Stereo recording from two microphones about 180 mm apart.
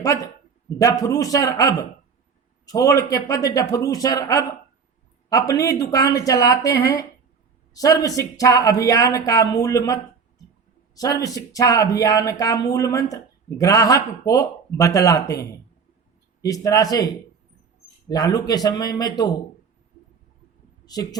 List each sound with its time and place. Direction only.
0.0 s speech: 20° left (ahead or behind)
20.8 s speech: 20° left (ahead or behind)